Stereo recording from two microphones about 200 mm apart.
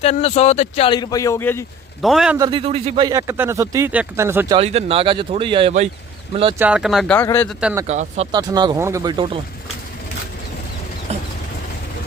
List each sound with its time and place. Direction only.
0.0 s speech: 30° left (ahead or behind)
0.9 s a man's voice: 20° left (ahead or behind)
2.0 s speech: centre (ahead or behind)
2.4 s speech: 25° right (ahead or behind)
3.1 s speech: 15° right (ahead or behind)
4.5 s speech: 30° right (ahead or behind)
6.6 s speech: 5° right (ahead or behind)
7.9 s speech: 35° right (ahead or behind)
8.3 s speech: 20° right (ahead or behind)
11.1 s vehicle: 35° right (ahead or behind)